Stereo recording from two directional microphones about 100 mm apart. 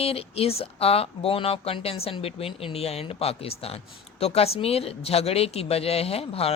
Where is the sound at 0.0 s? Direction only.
80° left.